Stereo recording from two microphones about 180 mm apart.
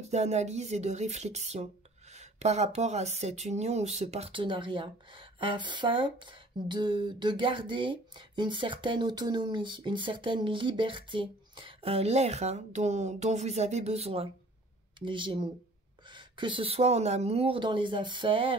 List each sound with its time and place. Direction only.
0.0 s speech: 40° right (ahead or behind)